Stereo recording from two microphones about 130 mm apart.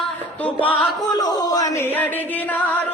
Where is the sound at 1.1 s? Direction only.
30° left (ahead or behind); by 2.8 s 15° left (ahead or behind).